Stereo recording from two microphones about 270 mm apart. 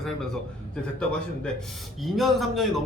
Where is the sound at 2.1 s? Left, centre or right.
Centre.